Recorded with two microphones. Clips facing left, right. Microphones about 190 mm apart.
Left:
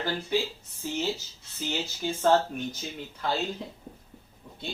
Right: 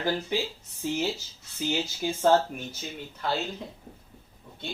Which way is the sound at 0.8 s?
15° right (ahead or behind).